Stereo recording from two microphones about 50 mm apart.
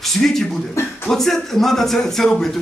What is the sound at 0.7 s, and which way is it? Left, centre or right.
Music, left.